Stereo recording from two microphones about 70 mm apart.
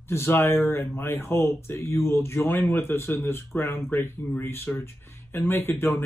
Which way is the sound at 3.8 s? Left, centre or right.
Left.